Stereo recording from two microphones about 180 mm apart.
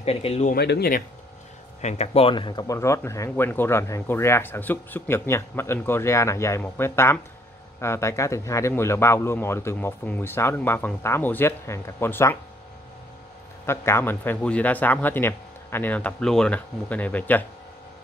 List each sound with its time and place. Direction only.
0.0 s speech: 35° left (ahead or behind)
0.5 s speech: 60° left (ahead or behind)
1.8 s speech: 40° left (ahead or behind); by 12.4 s 15° left (ahead or behind)
13.7 s speech: 15° left (ahead or behind)